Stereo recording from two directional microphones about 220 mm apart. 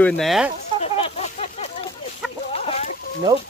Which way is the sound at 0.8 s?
30° left (ahead or behind).